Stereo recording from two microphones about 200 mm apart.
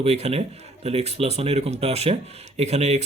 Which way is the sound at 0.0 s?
30° right (ahead or behind).